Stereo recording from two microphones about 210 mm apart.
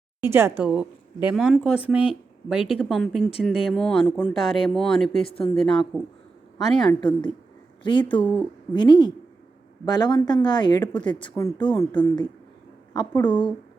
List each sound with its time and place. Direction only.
0.2 s speech: 10° right (ahead or behind)
5.2 s speech: 25° left (ahead or behind)
5.5 s speech: 5° left (ahead or behind)
7.9 s speech: 20° left (ahead or behind)
8.1 s speech: 10° left (ahead or behind)
8.7 s speech: 20° left (ahead or behind)